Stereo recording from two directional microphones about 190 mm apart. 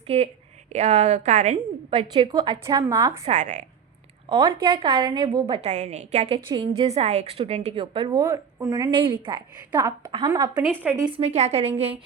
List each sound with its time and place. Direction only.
0.1 s a woman's voice: 30° right (ahead or behind); by 3.2 s 15° right (ahead or behind)
3.2 s a woman's voice: 40° right (ahead or behind)
4.3 s a woman's voice: 25° right (ahead or behind)
5.6 s a woman's voice: 35° right (ahead or behind); by 10.8 s 20° right (ahead or behind)
11.0 s a woman's voice: 30° right (ahead or behind)